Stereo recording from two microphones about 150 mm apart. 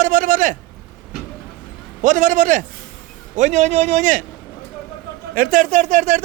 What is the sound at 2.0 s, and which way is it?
A man's voice, 55° right (ahead or behind).